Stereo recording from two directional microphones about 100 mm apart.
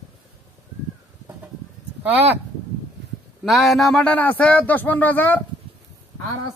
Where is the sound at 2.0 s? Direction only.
20° right (ahead or behind).